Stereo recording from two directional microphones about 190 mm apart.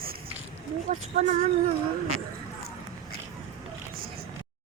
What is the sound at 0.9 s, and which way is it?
Speech, 40° right (ahead or behind).